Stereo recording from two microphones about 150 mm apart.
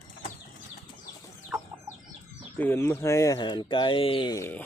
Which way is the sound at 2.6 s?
15° left (ahead or behind).